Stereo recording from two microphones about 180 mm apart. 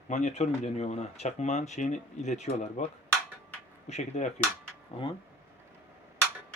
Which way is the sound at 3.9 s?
40° left (ahead or behind).